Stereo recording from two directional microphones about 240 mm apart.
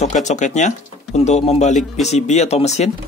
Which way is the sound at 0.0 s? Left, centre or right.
Left.